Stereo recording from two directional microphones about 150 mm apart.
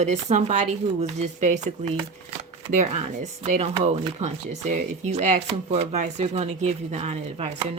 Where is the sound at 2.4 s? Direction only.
50° right (ahead or behind).